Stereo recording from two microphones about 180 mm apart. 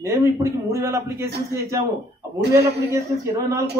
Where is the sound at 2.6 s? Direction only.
65° right (ahead or behind).